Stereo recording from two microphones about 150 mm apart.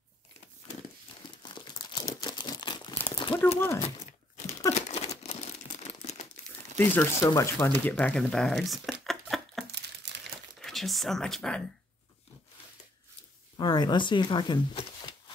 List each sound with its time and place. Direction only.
1.4 s crumpling: 30° left (ahead or behind)
3.5 s speech: 15° left (ahead or behind)
4.7 s crumpling: 45° left (ahead or behind)
6.8 s speech: 15° left (ahead or behind)
7.9 s a sound: 5° left (ahead or behind)
10.6 s speech: centre (ahead or behind)
13.6 s speech: 30° left (ahead or behind)